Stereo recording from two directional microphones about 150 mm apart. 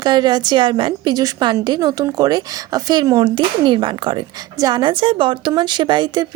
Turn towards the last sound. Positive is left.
turn(degrees=-30)  # may be behind; listen again after turning